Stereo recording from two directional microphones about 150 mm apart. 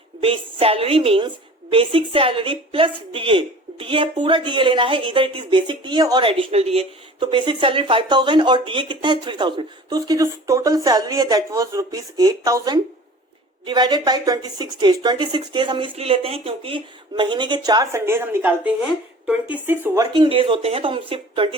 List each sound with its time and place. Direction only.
0.2 s a woman's voice: 40° right (ahead or behind)
18.0 s a woman's voice: 15° right (ahead or behind)
20.1 s a woman's voice: 35° right (ahead or behind)